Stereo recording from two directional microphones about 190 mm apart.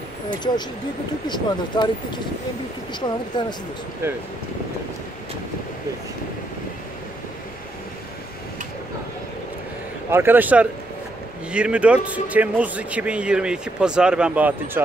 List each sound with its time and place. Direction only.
1.2 s speech: 25° left (ahead or behind)
10.1 s a man's voice: 10° right (ahead or behind)